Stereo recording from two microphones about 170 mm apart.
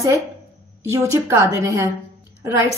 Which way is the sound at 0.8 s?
15° right (ahead or behind).